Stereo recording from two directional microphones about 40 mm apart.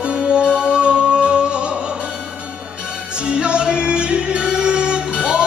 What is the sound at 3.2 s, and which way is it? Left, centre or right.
Music, right.